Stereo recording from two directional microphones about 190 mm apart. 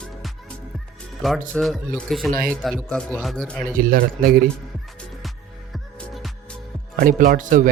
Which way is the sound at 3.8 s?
50° right (ahead or behind).